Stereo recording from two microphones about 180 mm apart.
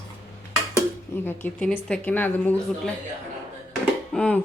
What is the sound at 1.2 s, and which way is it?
Speech, 10° left (ahead or behind).